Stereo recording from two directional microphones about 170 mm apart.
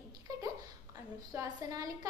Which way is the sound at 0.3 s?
20° right (ahead or behind).